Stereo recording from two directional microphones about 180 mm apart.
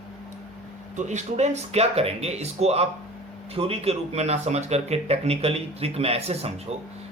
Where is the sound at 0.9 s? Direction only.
40° right (ahead or behind).